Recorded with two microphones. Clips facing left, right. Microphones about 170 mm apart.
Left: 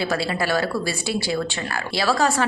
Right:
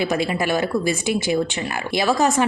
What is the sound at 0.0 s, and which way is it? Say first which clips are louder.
Speech: right 2 dB; 15° right (ahead or behind).